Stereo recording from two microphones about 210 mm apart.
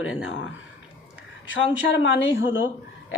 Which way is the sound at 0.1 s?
70° left (ahead or behind).